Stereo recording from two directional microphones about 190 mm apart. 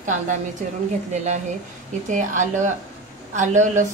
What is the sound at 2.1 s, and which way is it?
Speech, 40° right (ahead or behind).